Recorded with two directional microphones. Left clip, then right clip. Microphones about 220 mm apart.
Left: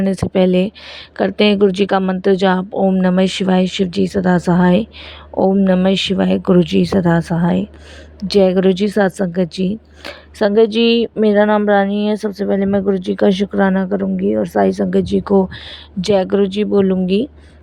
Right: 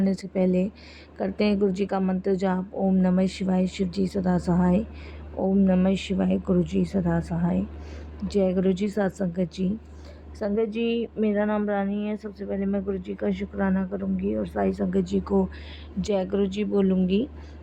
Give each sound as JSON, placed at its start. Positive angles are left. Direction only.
{"t": 0.0, "sound": "speech", "side_deg": 35}